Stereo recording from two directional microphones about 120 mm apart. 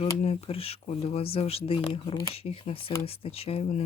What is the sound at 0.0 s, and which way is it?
Speech, 60° left (ahead or behind).